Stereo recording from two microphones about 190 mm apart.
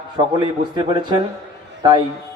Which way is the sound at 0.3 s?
25° right (ahead or behind).